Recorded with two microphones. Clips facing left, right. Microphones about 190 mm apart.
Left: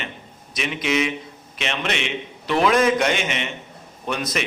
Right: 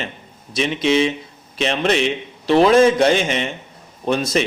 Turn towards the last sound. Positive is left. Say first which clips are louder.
# right 7 dB
turn(degrees=-30)  # may be behind; listen again after turning